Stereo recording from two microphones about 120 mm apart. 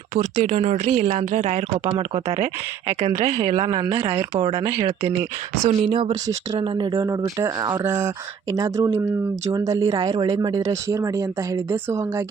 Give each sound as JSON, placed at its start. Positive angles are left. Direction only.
{"t": 0.1, "sound": "a woman's voice", "side_deg": -80}
{"t": 3.7, "sound": "speech", "side_deg": -40}